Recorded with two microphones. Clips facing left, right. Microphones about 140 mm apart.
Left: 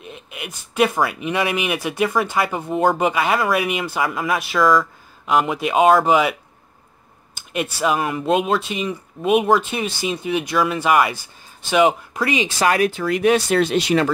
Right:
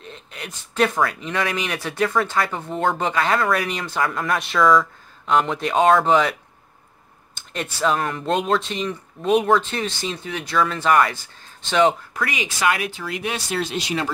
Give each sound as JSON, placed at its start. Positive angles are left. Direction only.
{"t": 0.0, "sound": "speech", "side_deg": 10}
{"t": 7.3, "sound": "speech", "side_deg": 10}
{"t": 12.2, "sound": "speech", "side_deg": 25}